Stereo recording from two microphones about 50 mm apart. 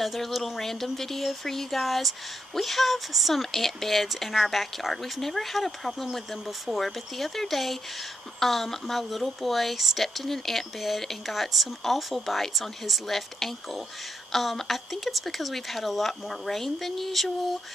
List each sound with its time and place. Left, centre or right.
0.0 s speech: centre